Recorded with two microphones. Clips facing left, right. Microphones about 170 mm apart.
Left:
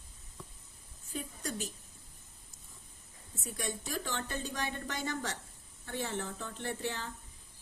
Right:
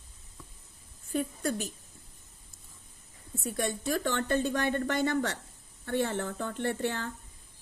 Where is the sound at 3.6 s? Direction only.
60° right (ahead or behind).